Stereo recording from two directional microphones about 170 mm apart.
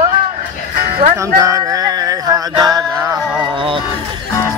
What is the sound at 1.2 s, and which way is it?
Music, 20° right (ahead or behind).